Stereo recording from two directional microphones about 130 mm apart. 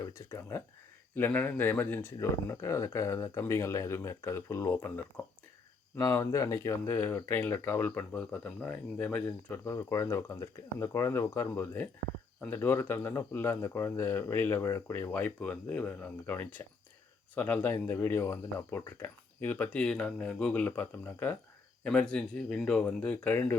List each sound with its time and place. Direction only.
0.0 s speech: 20° left (ahead or behind)
2.1 s speech: 25° left (ahead or behind)
6.0 s speech: 20° left (ahead or behind)
15.1 s speech: 10° left (ahead or behind)